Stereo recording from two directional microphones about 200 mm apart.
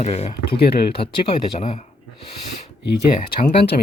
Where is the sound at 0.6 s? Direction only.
50° left (ahead or behind).